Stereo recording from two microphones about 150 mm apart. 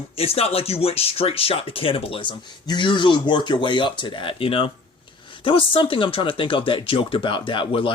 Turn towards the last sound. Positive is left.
turn(degrees=35)  # may be behind; listen again after turning